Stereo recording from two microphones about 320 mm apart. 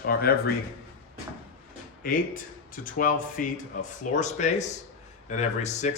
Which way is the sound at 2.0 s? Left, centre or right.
Left.